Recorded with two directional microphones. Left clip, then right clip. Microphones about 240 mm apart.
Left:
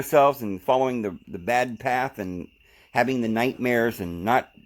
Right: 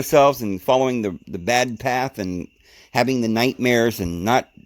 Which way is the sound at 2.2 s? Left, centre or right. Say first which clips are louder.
Right 5 dB; right.